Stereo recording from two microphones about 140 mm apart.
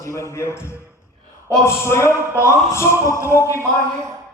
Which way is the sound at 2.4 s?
20° left (ahead or behind).